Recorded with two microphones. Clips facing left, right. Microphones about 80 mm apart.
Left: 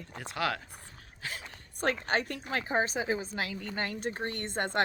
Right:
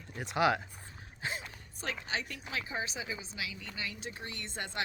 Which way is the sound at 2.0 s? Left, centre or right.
Left.